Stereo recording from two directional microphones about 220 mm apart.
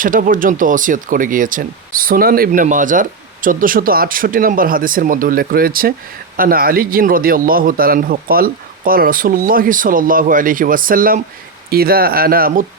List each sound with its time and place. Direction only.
0.0 s speech: 40° right (ahead or behind)